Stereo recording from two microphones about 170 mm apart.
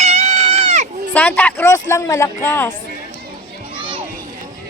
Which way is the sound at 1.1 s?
10° left (ahead or behind).